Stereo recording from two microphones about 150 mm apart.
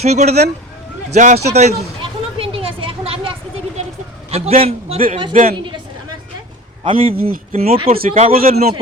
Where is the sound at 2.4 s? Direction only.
40° right (ahead or behind).